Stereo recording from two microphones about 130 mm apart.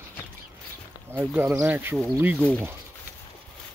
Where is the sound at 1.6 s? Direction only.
15° right (ahead or behind).